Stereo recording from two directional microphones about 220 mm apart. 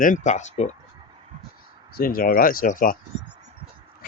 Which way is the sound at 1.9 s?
40° left (ahead or behind).